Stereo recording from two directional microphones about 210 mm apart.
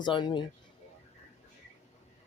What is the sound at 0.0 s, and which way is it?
Speech, 20° left (ahead or behind).